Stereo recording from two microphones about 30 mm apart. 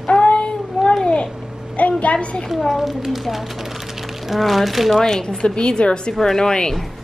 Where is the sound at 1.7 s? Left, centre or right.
Left.